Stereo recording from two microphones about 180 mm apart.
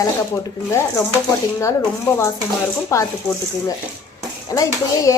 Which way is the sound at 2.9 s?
15° left (ahead or behind).